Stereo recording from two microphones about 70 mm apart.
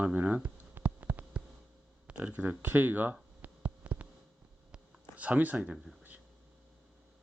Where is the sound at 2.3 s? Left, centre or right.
Right.